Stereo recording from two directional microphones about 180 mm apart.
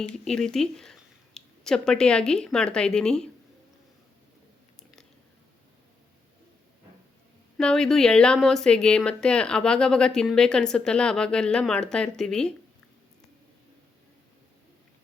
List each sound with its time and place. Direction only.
0.3 s speech: 5° left (ahead or behind)
4.8 s a sound: centre (ahead or behind)
7.6 s speech: 5° left (ahead or behind)